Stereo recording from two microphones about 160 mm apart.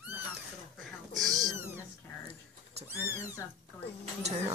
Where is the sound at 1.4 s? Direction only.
20° right (ahead or behind).